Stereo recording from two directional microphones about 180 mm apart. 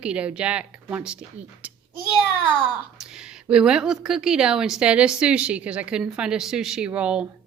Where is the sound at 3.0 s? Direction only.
5° right (ahead or behind).